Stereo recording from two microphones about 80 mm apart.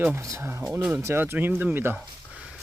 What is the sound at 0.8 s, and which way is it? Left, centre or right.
Speech, right.